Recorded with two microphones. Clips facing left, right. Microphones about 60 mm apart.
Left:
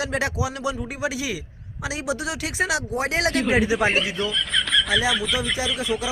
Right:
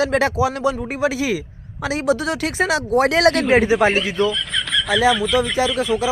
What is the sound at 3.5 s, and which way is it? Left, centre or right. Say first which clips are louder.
Speech: right 5 dB; right.